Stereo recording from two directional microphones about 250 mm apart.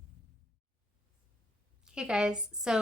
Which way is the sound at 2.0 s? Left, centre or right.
Centre.